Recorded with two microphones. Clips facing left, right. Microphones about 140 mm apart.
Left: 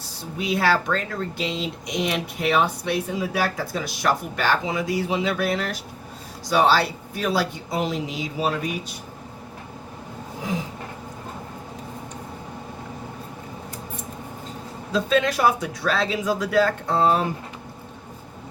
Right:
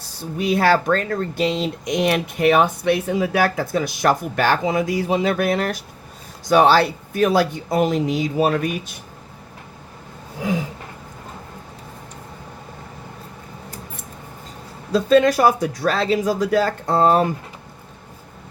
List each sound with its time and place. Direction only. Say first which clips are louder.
0.3 s speech: right 4 dB; 45° right (ahead or behind)
14.9 s speech: right 7 dB; 40° right (ahead or behind)